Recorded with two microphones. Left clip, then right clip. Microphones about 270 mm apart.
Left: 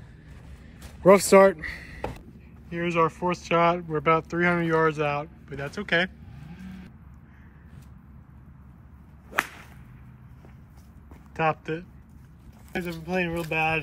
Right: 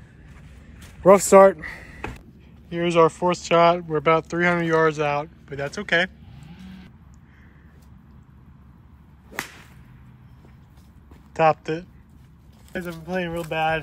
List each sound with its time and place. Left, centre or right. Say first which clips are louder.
1.0 s speech: right 4 dB; centre
2.0 s a sound: even; left
2.7 s speech: right 6 dB; centre
11.3 s speech: right 7 dB; centre